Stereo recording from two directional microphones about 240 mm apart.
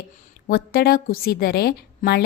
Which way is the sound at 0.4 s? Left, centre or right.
Left.